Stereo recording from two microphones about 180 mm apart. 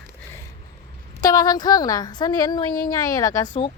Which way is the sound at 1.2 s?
20° left (ahead or behind).